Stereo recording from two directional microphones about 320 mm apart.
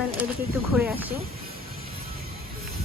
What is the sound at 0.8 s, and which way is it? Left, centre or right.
Speech, centre.